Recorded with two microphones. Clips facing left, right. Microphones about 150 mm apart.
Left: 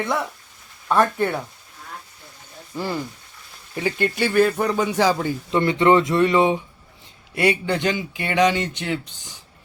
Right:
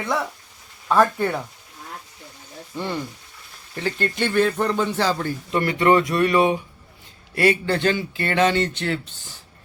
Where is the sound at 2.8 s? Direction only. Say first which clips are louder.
Left 1 dB; 5° left (ahead or behind).